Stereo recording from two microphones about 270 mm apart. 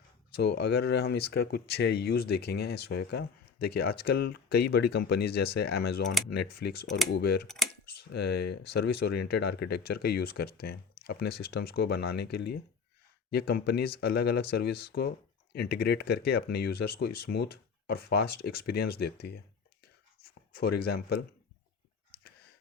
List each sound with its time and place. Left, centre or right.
0.3 s speech: left
7.4 s speech: centre
7.9 s speech: left
20.5 s speech: left